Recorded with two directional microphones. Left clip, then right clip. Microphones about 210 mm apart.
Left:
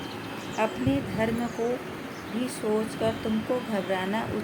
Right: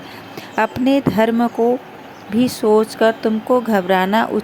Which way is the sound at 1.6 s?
90° right.